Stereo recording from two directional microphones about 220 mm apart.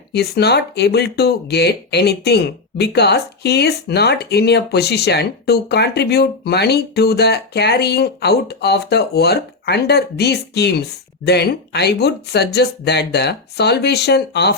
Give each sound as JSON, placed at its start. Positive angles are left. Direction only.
{"t": 0.1, "sound": "speech", "side_deg": 50}